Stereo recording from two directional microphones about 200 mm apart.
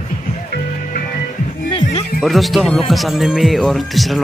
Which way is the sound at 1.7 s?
30° left (ahead or behind).